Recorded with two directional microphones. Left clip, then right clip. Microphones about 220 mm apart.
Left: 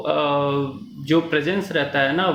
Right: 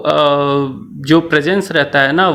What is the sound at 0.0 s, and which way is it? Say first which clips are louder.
Speech: right 8 dB; 45° right (ahead or behind).